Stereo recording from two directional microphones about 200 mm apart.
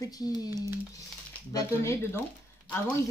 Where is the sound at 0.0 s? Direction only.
20° left (ahead or behind).